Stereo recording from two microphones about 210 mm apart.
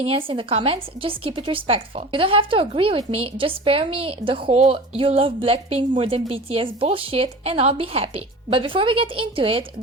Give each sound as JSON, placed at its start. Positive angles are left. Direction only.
{"t": 0.0, "sound": "speech", "side_deg": -25}